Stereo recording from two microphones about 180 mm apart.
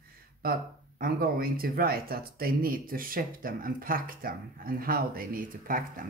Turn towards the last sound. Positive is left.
turn(degrees=-50)  # may be behind; listen again after turning